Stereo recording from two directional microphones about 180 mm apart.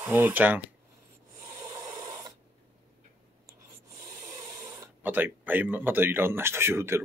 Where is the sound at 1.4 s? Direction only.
15° right (ahead or behind).